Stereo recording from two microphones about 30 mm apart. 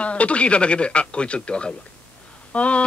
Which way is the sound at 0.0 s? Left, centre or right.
Left.